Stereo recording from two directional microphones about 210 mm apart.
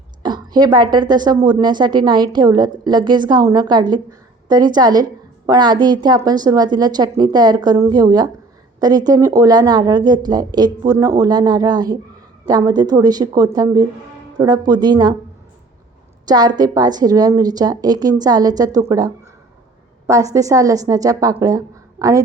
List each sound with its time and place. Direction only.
0.2 s a woman's voice: 20° right (ahead or behind)
16.2 s a woman's voice: 20° right (ahead or behind)